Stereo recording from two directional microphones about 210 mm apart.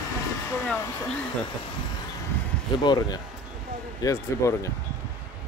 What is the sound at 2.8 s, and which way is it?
Speech, 20° left (ahead or behind).